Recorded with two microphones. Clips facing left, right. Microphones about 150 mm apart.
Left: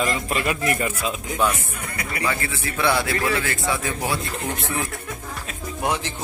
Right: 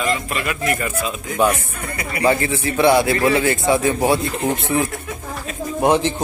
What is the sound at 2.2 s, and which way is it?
Speech, 30° right (ahead or behind).